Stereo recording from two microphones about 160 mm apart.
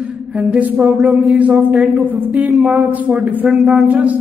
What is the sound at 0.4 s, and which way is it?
A man's voice, 10° right (ahead or behind).